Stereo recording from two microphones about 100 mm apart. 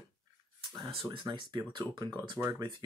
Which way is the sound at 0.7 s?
55° right (ahead or behind).